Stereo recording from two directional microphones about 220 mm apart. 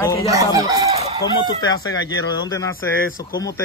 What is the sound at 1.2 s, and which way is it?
Speech, 20° left (ahead or behind).